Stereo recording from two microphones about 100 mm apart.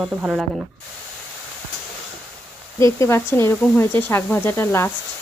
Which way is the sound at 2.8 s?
30° left (ahead or behind).